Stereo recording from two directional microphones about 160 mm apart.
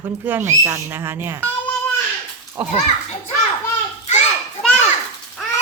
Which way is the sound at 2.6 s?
10° right (ahead or behind).